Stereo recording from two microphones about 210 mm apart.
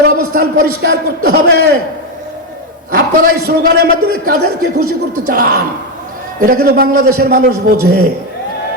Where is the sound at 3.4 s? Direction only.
50° right (ahead or behind).